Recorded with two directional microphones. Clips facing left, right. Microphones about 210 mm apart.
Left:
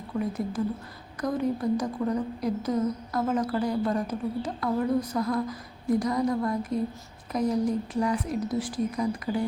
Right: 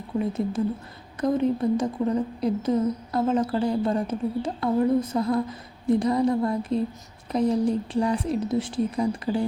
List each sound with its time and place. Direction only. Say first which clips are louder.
0.2 s a woman's voice: right 3 dB; 25° right (ahead or behind)